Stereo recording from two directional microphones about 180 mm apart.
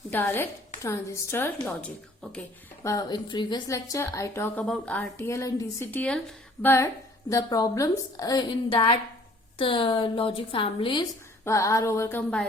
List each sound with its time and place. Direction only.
0.1 s speech: 10° left (ahead or behind)
2.8 s a woman's voice: 20° left (ahead or behind)
11.4 s speech: 15° left (ahead or behind)